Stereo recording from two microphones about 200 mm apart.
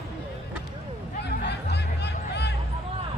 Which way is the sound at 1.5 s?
55° left (ahead or behind).